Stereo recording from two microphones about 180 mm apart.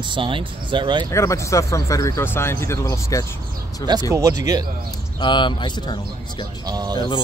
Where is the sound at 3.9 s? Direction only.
25° right (ahead or behind).